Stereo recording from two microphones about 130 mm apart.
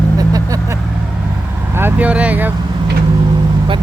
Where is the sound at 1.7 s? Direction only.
15° right (ahead or behind).